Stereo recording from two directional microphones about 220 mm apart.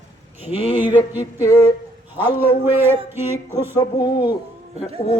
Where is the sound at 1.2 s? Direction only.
15° left (ahead or behind).